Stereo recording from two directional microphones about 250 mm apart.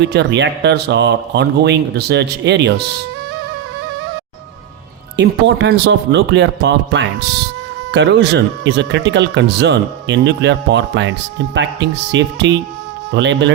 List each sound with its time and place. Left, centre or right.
0.0 s speech: right
5.1 s speech: right